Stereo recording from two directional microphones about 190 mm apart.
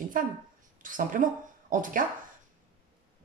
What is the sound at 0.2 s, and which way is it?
Speech, 45° right (ahead or behind).